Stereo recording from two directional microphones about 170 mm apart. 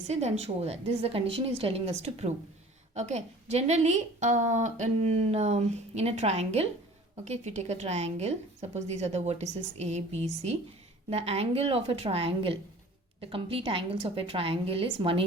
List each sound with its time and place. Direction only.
0.1 s a woman's voice: 40° right (ahead or behind)